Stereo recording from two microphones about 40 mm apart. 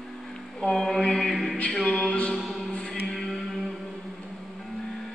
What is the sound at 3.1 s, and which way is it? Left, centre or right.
Music, centre.